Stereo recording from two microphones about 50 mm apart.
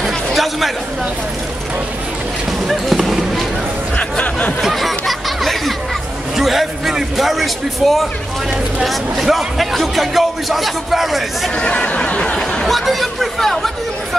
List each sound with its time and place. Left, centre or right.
0.0 s chatter: centre
2.7 s basketball bounce: centre
3.9 s chatter: left
4.6 s chatter: centre
6.3 s a man's voice: centre
11.5 s speech: left
12.6 s speech: centre